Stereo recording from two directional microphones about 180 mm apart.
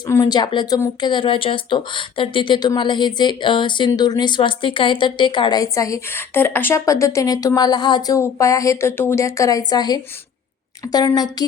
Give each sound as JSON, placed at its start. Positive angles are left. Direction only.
{"t": 0.1, "sound": "speech", "side_deg": 20}